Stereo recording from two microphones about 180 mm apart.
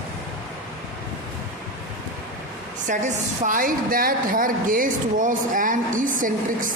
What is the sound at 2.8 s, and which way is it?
A woman's voice, 45° right (ahead or behind).